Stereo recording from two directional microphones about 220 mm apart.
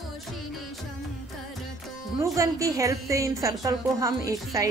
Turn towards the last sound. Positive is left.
turn(degrees=-15)  # may be behind; listen again after turning